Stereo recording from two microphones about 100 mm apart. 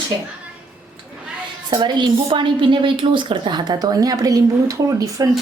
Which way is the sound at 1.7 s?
50° right (ahead or behind).